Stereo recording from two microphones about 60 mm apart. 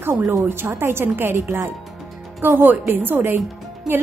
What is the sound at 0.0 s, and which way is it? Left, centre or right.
A woman's voice, right.